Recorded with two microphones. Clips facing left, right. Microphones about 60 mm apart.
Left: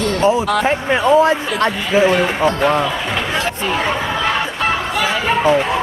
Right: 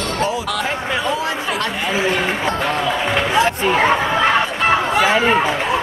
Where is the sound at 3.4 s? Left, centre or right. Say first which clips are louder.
Right 4 dB; centre.